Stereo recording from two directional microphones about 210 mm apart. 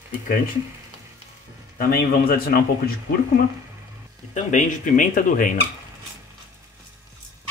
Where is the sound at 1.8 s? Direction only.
45° left (ahead or behind).